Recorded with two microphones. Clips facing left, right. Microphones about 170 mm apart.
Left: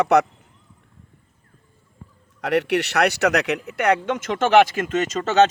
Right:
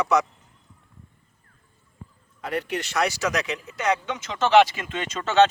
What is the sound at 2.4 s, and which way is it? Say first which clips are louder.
Speech: left 8 dB; 75° left (ahead or behind).